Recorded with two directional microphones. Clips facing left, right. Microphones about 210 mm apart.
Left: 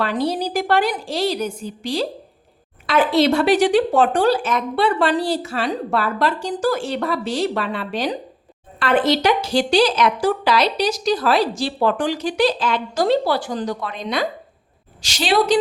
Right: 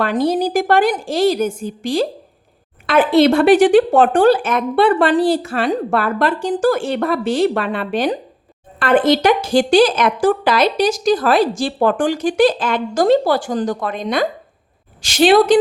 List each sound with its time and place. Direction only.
0.0 s a woman's voice: 50° right (ahead or behind)